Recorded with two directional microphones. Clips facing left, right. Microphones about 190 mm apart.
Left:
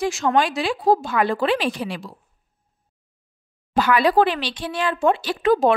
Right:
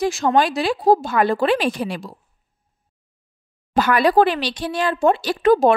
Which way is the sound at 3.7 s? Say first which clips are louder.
Right 2 dB; 45° right (ahead or behind).